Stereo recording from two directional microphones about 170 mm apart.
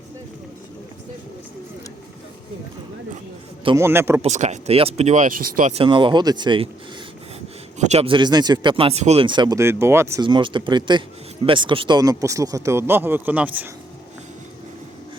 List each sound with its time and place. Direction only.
3.8 s speech: 15° right (ahead or behind)
4.2 s speech: 45° right (ahead or behind)
5.7 s speech: 30° right (ahead or behind)
7.8 s speech: 40° right (ahead or behind); by 10.2 s 15° right (ahead or behind)
10.2 s speech: 30° right (ahead or behind); by 13.7 s 10° right (ahead or behind)